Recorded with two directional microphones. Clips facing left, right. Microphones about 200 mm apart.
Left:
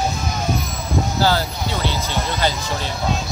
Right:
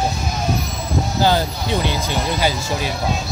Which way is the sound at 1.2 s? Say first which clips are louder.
Right 4 dB; 20° right (ahead or behind).